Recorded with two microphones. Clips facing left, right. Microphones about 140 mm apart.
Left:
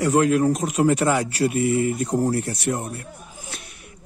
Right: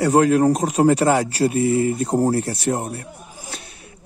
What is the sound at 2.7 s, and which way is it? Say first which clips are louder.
Speech: right 3 dB; 50° right (ahead or behind).